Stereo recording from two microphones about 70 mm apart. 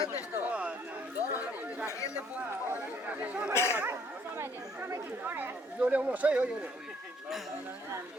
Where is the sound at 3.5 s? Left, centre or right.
Left.